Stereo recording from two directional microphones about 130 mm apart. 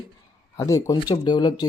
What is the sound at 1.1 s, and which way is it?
Speech, 35° left (ahead or behind).